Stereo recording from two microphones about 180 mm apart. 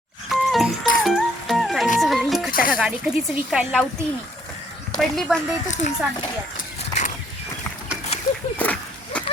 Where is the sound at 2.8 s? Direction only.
5° right (ahead or behind).